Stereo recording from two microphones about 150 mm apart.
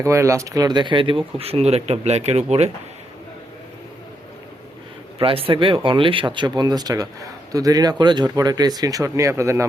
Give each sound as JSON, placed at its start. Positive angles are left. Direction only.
{"t": 0.0, "sound": "speech", "side_deg": -20}
{"t": 5.2, "sound": "a man's voice", "side_deg": -40}